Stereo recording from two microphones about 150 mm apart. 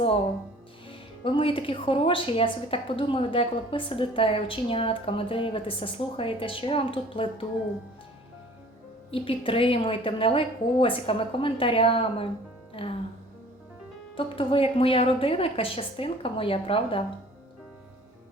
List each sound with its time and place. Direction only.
0.9 s a woman's voice: 35° left (ahead or behind)
9.0 s a woman's voice: 35° left (ahead or behind)
14.2 s a woman's voice: 35° left (ahead or behind)